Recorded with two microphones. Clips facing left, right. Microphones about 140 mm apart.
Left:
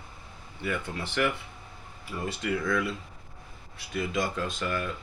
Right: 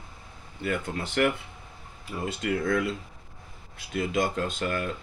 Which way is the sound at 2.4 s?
45° right (ahead or behind).